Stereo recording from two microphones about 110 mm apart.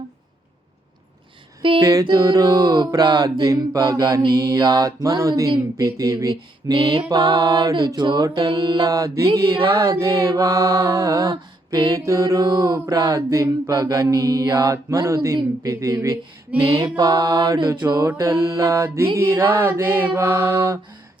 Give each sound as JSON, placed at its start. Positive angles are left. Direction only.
{"t": 1.8, "sound": "mantra", "side_deg": -30}
{"t": 4.6, "sound": "mantra", "side_deg": -35}
{"t": 17.0, "sound": "mantra", "side_deg": -35}
{"t": 17.7, "sound": "music", "side_deg": -40}
{"t": 18.1, "sound": "mantra", "side_deg": -25}